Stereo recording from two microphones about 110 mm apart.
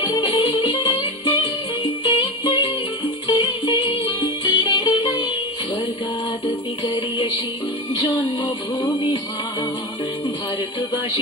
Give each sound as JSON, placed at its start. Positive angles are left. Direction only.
{"t": 0.0, "sound": "music", "side_deg": 40}
{"t": 2.0, "sound": "music", "side_deg": 50}
{"t": 3.3, "sound": "music", "side_deg": 40}
{"t": 7.9, "sound": "music", "side_deg": 40}